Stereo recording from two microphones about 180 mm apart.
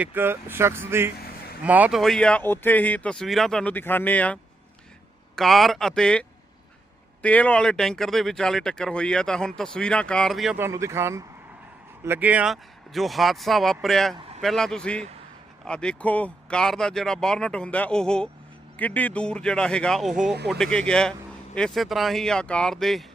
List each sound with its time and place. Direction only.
0.0 s speech: 10° right (ahead or behind)
1.1 s vehicle: 60° left (ahead or behind)
1.6 s speech: 10° right (ahead or behind); by 4.4 s 10° left (ahead or behind)
5.4 s speech: centre (ahead or behind)
10.6 s speech: 15° right (ahead or behind); by 23.0 s centre (ahead or behind)